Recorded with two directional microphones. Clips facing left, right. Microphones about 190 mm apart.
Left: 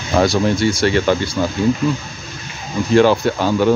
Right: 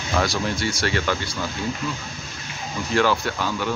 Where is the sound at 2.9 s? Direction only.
25° left (ahead or behind).